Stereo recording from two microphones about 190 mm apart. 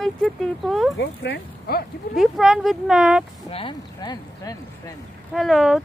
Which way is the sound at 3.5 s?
25° left (ahead or behind).